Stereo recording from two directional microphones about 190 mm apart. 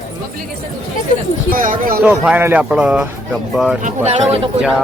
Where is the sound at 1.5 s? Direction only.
45° right (ahead or behind).